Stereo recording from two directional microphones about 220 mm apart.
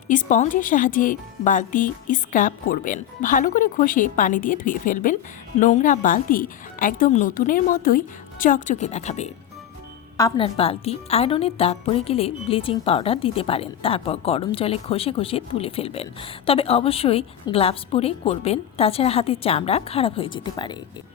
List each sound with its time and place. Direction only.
0.1 s speech: 35° left (ahead or behind)
10.2 s a woman's voice: 20° left (ahead or behind)